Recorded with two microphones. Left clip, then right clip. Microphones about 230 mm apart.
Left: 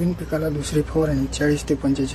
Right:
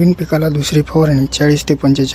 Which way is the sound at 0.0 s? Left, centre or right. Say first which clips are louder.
Right 9 dB; right.